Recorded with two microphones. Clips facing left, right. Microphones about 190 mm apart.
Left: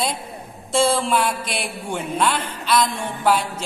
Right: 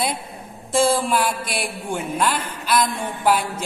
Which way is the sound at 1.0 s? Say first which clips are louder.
Even; 5° right (ahead or behind).